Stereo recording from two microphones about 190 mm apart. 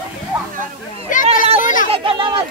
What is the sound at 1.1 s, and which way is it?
Children playing, 45° left (ahead or behind).